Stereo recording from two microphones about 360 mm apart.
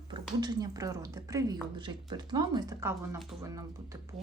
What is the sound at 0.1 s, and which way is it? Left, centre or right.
Speech, centre.